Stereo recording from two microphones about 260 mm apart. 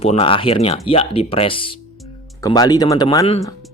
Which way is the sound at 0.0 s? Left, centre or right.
Left.